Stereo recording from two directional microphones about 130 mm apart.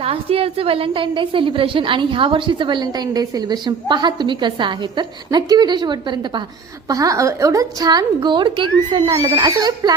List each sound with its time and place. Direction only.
0.0 s a woman's voice: 50° right (ahead or behind); by 9.9 s 30° right (ahead or behind)